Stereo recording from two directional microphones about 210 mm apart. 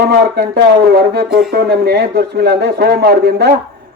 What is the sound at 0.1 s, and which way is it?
Speech, 50° right (ahead or behind).